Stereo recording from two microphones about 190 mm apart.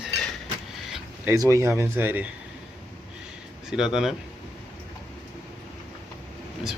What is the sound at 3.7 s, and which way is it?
Speech, centre (ahead or behind).